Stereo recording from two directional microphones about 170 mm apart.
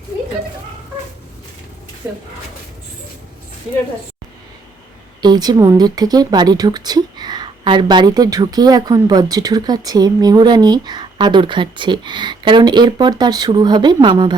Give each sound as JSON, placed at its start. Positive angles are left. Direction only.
{"t": 2.0, "sound": "speech", "side_deg": -15}
{"t": 5.2, "sound": "speech", "side_deg": -25}